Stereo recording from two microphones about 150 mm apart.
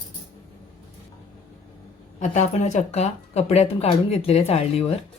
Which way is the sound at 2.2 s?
50° left (ahead or behind).